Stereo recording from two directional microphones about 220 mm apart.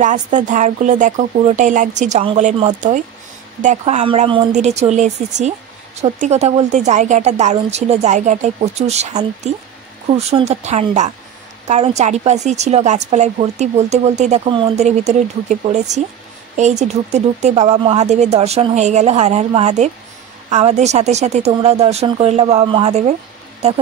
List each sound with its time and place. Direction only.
0.0 s a woman's voice: 35° right (ahead or behind)